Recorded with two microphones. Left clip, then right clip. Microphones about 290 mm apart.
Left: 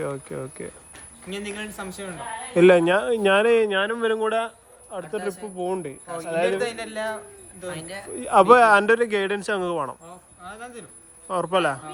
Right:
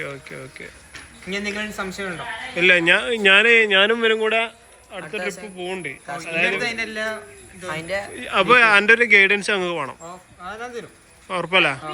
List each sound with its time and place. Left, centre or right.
0.0 s speech: centre
1.3 s speech: centre
2.6 s speech: centre
6.6 s a man's voice: left
7.8 s speech: centre
8.1 s speech: centre
10.4 s speech: centre
11.3 s speech: centre